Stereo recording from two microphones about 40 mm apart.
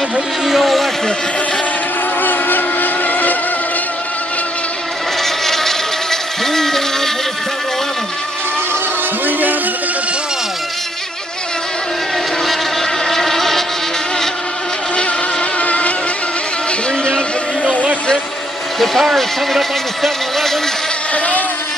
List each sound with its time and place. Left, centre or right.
0.5 s a sound: centre
2.2 s vehicle: left
5.2 s insect: centre
6.4 s a sound: centre
9.2 s music: right
13.1 s motorboat: centre
15.6 s vehicle: left
18.8 s speech: centre
21.1 s a sound: left